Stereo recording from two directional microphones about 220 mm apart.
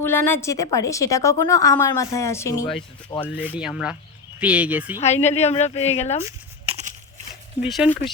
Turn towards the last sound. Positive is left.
turn(degrees=0)  # may be behind; listen again after turning